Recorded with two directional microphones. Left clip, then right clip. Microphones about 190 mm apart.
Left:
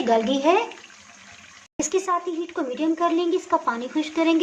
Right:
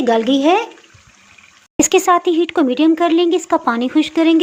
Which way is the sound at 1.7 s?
45° right (ahead or behind).